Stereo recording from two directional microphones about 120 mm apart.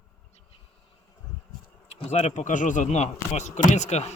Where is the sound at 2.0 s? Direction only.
80° left.